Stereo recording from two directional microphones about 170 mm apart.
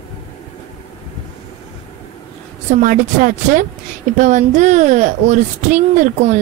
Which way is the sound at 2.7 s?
50° right (ahead or behind).